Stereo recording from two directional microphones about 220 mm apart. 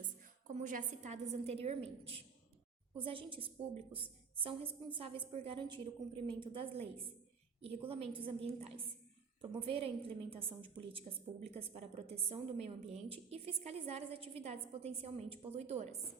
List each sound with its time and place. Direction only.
0.4 s a woman's voice: 35° right (ahead or behind)